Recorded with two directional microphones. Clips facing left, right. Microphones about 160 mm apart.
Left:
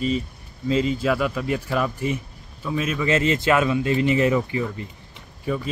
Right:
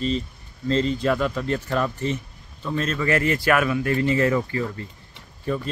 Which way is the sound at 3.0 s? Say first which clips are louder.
Left 1 dB; 20° left (ahead or behind).